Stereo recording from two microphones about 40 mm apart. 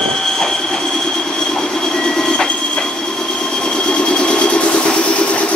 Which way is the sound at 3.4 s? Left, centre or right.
Centre.